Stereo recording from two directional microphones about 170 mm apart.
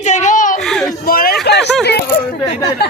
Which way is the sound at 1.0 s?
60° left (ahead or behind).